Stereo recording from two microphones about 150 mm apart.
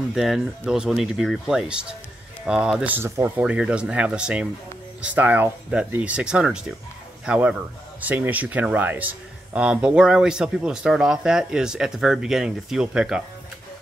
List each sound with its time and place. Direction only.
0.1 s speech: centre (ahead or behind)